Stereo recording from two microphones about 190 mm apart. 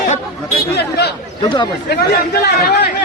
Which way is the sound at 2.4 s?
55° left (ahead or behind).